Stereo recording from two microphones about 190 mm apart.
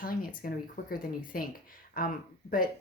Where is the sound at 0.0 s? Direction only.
50° left (ahead or behind).